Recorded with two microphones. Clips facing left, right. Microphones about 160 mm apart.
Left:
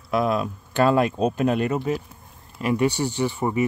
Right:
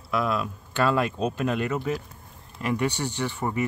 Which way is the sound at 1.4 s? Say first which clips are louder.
Left 3 dB; 25° left (ahead or behind).